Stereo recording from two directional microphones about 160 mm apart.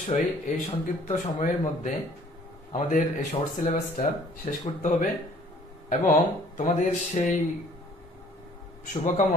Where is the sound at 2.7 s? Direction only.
55° left (ahead or behind).